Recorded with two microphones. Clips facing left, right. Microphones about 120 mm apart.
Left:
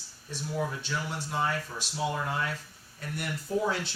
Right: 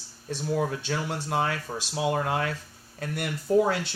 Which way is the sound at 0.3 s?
60° right (ahead or behind).